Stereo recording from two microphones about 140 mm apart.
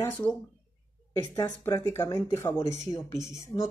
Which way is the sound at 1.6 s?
15° left (ahead or behind).